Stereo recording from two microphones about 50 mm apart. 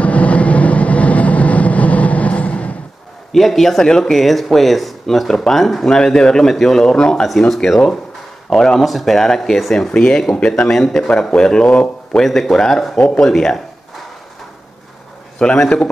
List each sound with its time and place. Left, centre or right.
0.0 s vehicle: left
3.3 s speech: centre
5.9 s a man's voice: centre
8.8 s a man's voice: centre; by 12.2 s left
12.2 s a man's voice: centre
15.3 s a sound: left